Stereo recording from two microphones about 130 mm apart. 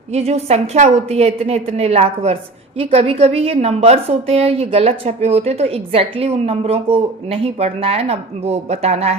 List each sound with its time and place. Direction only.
0.1 s a woman's voice: 55° right (ahead or behind)